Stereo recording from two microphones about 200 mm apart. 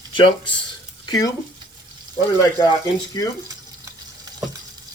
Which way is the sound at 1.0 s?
20° left (ahead or behind).